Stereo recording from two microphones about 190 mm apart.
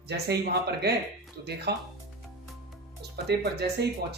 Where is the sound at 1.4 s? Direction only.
60° right (ahead or behind).